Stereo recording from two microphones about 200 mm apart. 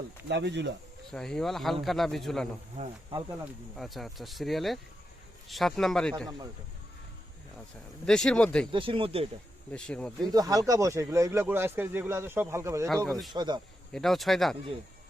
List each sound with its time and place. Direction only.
0.3 s speech: 60° right (ahead or behind)
1.1 s speech: 5° left (ahead or behind)
3.8 s speech: centre (ahead or behind)
8.0 s speech: 5° left (ahead or behind)
8.7 s speech: 25° right (ahead or behind)
9.7 s speech: 5° left (ahead or behind)
10.3 s speech: 20° right (ahead or behind)
13.1 s speech: centre (ahead or behind)
13.3 s speech: 20° right (ahead or behind)
13.9 s speech: centre (ahead or behind)